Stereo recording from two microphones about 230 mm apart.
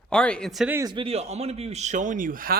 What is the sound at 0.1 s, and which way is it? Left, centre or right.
A man's voice, centre.